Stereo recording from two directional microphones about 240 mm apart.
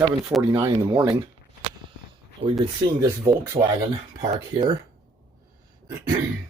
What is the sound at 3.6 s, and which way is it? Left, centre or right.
Speech, right.